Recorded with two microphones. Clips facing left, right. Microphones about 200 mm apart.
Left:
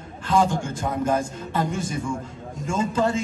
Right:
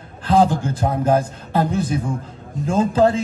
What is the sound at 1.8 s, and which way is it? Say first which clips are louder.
Speech: right 6 dB; 60° right (ahead or behind).